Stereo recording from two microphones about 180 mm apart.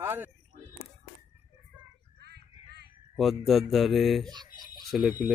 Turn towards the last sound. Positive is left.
turn(degrees=0)  # may be behind; listen again after turning